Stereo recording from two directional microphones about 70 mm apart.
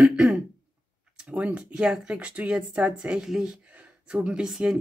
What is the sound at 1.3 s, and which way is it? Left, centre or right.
Speech, centre.